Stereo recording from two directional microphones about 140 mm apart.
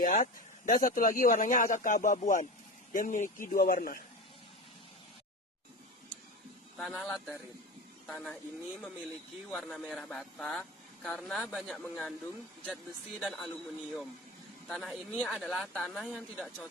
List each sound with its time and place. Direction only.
0.0 s speech: 65° left (ahead or behind)
3.5 s a man's voice: 90° left
6.7 s speech: centre (ahead or behind)
9.5 s speech: 5° left (ahead or behind)
14.7 s speech: centre (ahead or behind)